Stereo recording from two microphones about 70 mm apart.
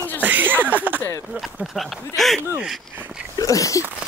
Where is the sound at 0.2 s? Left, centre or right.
Right.